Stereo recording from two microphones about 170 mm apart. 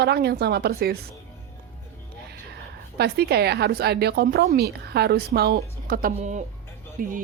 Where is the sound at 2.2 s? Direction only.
70° right (ahead or behind).